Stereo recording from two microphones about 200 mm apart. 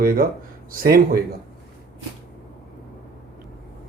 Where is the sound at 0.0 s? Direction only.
45° right (ahead or behind).